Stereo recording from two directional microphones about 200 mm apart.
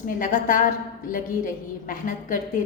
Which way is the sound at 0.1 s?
40° left (ahead or behind).